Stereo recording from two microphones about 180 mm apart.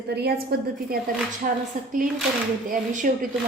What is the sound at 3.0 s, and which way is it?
Speech, 45° right (ahead or behind).